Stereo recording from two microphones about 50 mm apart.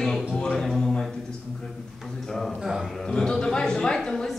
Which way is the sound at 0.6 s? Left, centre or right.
Centre.